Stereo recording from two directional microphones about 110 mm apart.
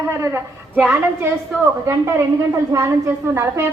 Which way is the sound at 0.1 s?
25° right (ahead or behind).